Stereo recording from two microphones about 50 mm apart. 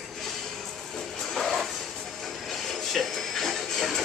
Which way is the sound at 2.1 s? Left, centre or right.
Centre.